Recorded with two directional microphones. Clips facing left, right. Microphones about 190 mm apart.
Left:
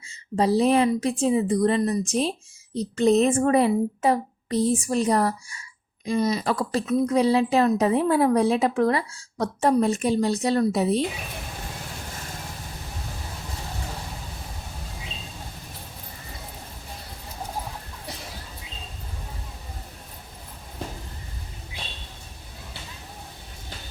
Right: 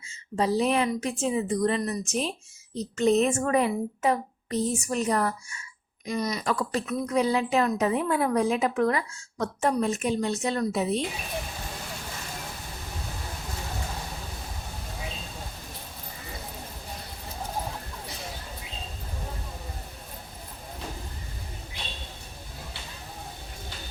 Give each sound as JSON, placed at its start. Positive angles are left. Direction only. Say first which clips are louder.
{"t": 0.3, "sound": "a woman's voice", "louder": "left 5 dB", "side_deg": 35}